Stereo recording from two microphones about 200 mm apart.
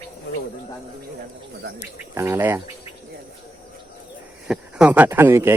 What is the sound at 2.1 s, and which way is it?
Speech, 15° right (ahead or behind).